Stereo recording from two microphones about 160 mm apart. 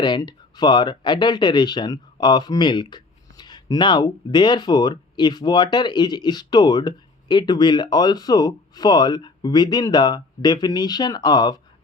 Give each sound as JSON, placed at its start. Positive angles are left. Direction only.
{"t": 0.0, "sound": "speech", "side_deg": 25}